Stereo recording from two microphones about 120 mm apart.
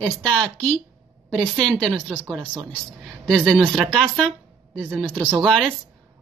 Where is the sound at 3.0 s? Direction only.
5° left (ahead or behind).